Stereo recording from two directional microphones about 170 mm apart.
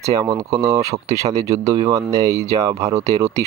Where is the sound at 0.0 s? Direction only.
20° right (ahead or behind).